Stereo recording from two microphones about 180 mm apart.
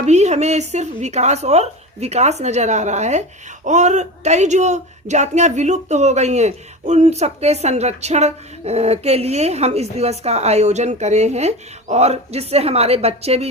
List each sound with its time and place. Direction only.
0.0 s speech: 40° right (ahead or behind)